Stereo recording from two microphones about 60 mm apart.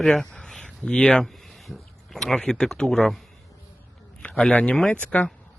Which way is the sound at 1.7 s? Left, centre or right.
Centre.